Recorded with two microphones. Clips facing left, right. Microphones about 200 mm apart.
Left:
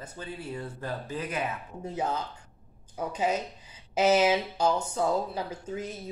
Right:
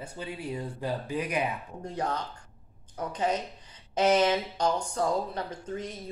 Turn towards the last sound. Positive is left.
turn(degrees=5)  # may be behind; listen again after turning